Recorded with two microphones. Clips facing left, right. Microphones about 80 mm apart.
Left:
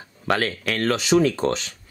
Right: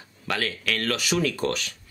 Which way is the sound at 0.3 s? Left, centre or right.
Left.